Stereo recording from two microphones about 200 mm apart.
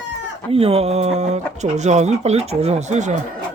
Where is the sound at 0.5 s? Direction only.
30° right (ahead or behind).